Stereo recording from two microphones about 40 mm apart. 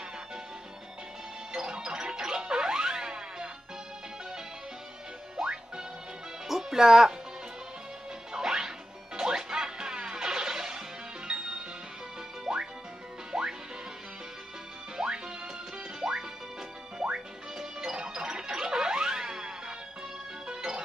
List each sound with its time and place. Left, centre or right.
1.5 s music: centre
5.4 s music: centre
8.3 s music: centre
15.0 s music: centre